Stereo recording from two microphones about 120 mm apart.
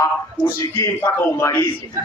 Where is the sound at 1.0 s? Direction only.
15° left (ahead or behind).